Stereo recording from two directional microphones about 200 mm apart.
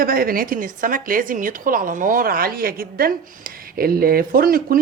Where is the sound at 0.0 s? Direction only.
45° right (ahead or behind).